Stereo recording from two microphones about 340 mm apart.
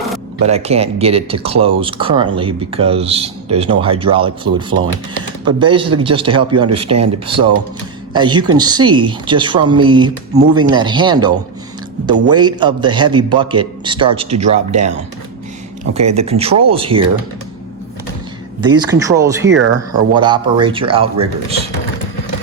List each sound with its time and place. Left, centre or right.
0.4 s speech: centre
16.0 s speech: centre
18.9 s speech: centre